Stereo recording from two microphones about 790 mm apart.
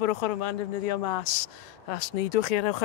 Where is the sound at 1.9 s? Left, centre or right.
Left.